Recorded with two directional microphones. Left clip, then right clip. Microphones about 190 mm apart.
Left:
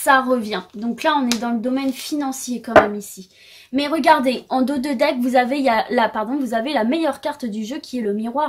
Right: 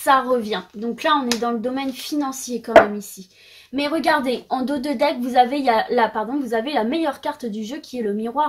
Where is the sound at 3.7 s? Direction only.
40° left (ahead or behind).